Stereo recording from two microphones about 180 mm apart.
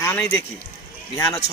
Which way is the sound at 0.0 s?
15° left (ahead or behind).